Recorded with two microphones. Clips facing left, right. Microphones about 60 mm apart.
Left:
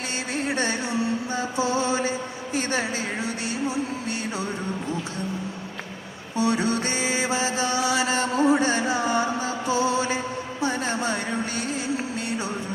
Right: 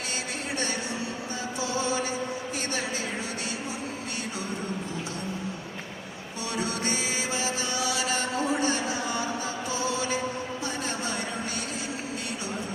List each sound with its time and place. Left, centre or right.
0.5 s music: left
1.5 s mantra: left
6.3 s mantra: left
10.6 s music: left